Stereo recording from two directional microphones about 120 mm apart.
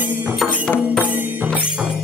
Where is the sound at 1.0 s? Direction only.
15° right (ahead or behind).